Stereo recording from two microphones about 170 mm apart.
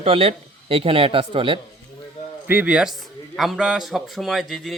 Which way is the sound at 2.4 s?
10° right (ahead or behind).